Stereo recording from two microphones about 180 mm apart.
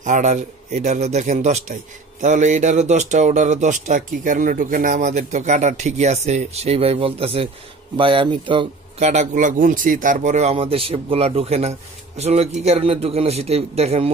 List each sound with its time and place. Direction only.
0.0 s speech: 45° right (ahead or behind)
9.0 s speech: 40° right (ahead or behind)